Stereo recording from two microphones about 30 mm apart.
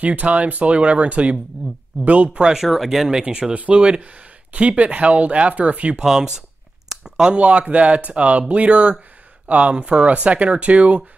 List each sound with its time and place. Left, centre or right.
0.0 s speech: right
2.3 s speech: right
2.7 s speech: centre
3.1 s speech: right
3.5 s speech: right
6.0 s speech: centre
7.0 s a sound: right
7.3 s speech: right